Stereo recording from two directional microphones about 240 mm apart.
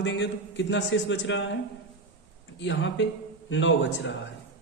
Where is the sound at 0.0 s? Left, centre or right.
Left.